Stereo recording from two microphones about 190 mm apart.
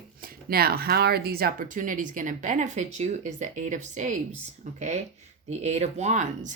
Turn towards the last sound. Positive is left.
turn(degrees=-40)  # may be behind; listen again after turning